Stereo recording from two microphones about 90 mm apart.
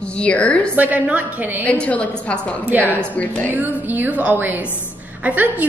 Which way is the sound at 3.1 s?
15° left (ahead or behind).